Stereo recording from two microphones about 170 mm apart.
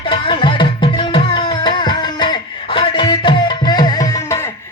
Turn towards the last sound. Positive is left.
turn(degrees=20)  # may be behind; listen again after turning